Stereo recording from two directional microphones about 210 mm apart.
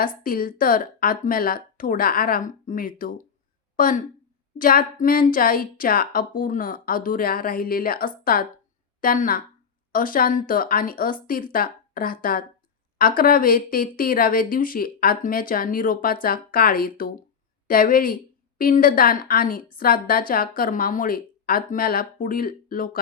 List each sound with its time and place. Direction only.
0.2 s a woman's voice: 40° left (ahead or behind)